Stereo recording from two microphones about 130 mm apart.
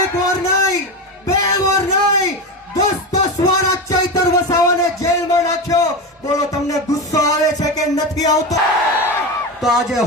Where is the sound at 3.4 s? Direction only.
25° left (ahead or behind).